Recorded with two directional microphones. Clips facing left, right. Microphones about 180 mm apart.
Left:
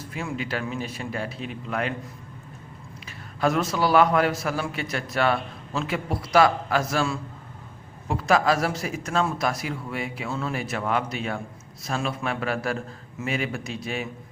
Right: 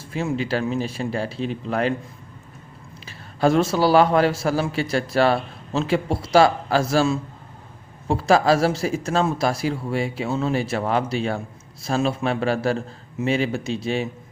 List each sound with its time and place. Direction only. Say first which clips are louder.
0.0 s a man's voice: right 6 dB; 30° right (ahead or behind)
3.1 s a man's voice: right 5 dB; 30° right (ahead or behind)